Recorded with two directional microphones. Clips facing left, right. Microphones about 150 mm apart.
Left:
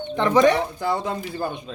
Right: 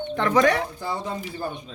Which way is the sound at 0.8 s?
70° left (ahead or behind).